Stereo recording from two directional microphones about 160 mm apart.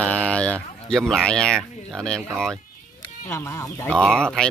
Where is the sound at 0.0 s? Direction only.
10° left (ahead or behind).